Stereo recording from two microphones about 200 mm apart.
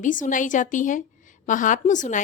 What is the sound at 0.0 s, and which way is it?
Speech, 40° left (ahead or behind).